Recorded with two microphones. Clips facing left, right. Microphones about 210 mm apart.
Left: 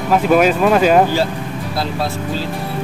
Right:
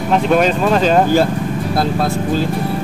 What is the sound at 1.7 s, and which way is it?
Speech, 50° right (ahead or behind).